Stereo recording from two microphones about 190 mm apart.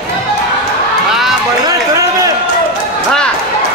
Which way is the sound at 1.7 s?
15° right (ahead or behind).